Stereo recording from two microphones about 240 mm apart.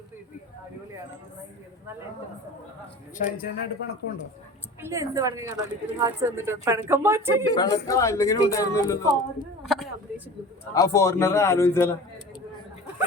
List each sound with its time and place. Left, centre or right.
3.2 s speech: left
4.8 s speech: centre
7.4 s a man's voice: centre
9.6 s speech: centre
10.8 s a man's voice: centre